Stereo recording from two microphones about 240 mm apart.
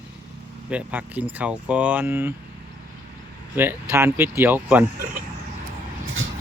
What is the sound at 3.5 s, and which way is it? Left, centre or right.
Speech, centre.